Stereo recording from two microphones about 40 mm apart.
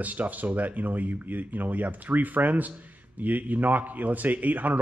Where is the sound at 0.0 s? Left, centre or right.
Right.